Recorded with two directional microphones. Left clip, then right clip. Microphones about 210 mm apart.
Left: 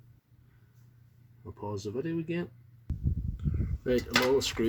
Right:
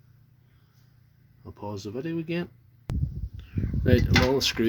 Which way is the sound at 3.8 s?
35° right (ahead or behind).